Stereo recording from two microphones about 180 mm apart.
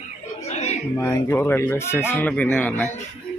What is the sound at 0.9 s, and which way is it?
Speech, 15° left (ahead or behind).